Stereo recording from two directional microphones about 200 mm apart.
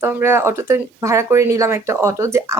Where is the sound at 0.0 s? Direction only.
10° right (ahead or behind).